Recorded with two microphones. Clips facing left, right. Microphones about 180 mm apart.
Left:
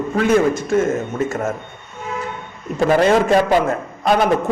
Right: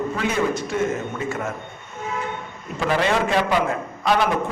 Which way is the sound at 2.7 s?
45° left (ahead or behind).